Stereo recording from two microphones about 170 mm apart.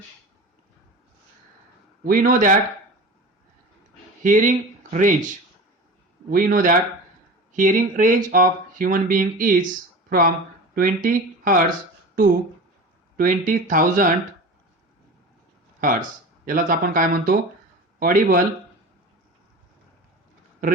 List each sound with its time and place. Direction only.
2.0 s speech: 55° right (ahead or behind)
4.2 s speech: 50° right (ahead or behind)
6.3 s speech: 50° right (ahead or behind)
13.1 s speech: 50° right (ahead or behind)
15.8 s speech: 50° right (ahead or behind)